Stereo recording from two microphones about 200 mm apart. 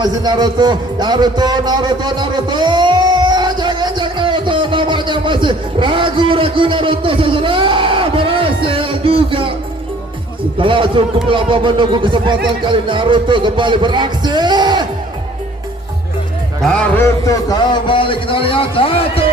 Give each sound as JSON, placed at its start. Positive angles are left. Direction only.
{"t": 0.0, "sound": "a sound", "side_deg": -20}
{"t": 10.6, "sound": "speech", "side_deg": -25}
{"t": 16.6, "sound": "a man's voice", "side_deg": 5}